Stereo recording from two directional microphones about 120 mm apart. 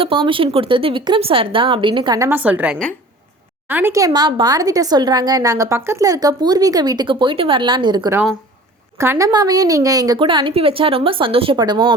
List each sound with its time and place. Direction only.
0.0 s speech: 45° right (ahead or behind)
2.3 s a woman's voice: 15° right (ahead or behind); by 8.1 s 35° right (ahead or behind)
9.0 s a woman's voice: 25° right (ahead or behind)
10.2 s speech: 45° right (ahead or behind)
11.5 s a woman's voice: 40° right (ahead or behind)